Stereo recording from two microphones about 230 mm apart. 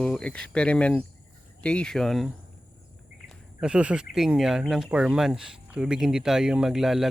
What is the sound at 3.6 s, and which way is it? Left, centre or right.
Speech, centre.